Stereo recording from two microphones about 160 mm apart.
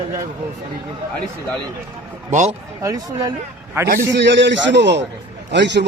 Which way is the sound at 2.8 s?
20° right (ahead or behind).